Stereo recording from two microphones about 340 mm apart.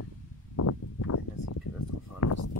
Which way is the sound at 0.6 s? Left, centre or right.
Left.